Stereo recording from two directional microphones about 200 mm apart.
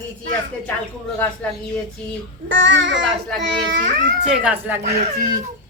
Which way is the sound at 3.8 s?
40° right (ahead or behind).